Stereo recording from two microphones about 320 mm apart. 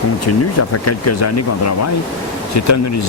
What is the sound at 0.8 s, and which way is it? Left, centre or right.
Speech, left.